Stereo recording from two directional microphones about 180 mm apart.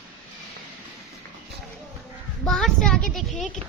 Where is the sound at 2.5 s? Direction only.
Centre (ahead or behind).